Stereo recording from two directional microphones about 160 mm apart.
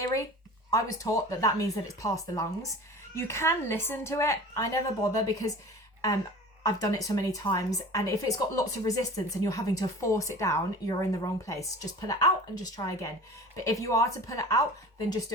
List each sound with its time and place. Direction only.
0.0 s a sound: 20° left (ahead or behind)
0.7 s a woman's voice: 20° left (ahead or behind)
6.6 s speech: 20° left (ahead or behind)
13.7 s speech: 20° left (ahead or behind)